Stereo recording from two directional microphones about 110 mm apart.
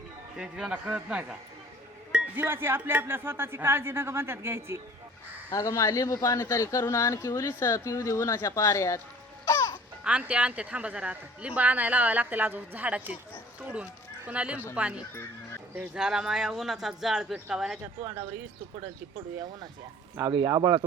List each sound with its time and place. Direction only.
0.3 s speech: 10° right (ahead or behind)
5.5 s speech: 30° left (ahead or behind)
9.5 s music: 25° left (ahead or behind)
10.0 s speech: 10° right (ahead or behind)
20.4 s speech: 30° right (ahead or behind)